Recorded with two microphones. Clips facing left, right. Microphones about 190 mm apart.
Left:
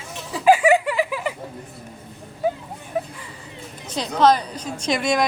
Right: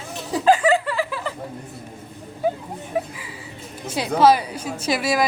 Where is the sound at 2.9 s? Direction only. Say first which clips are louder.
Right 1 dB; 5° right (ahead or behind).